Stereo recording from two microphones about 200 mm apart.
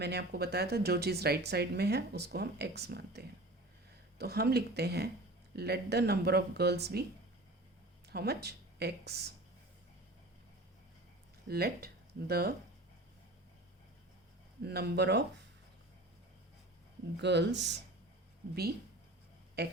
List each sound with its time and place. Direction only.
0.0 s speech: 55° right (ahead or behind)
8.1 s speech: 55° right (ahead or behind)
11.4 s speech: 50° right (ahead or behind)
14.6 s speech: 55° right (ahead or behind)
17.2 s speech: 60° right (ahead or behind)
19.6 s speech: 55° right (ahead or behind)